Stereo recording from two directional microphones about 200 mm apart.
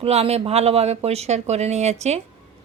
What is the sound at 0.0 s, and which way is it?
A woman's voice, 30° right (ahead or behind).